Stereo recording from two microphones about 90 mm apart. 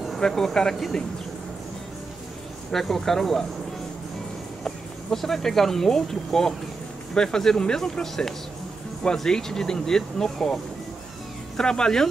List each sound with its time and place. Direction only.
0.0 s speech: centre (ahead or behind)
2.7 s speech: 5° left (ahead or behind)
4.6 s speech: 5° left (ahead or behind)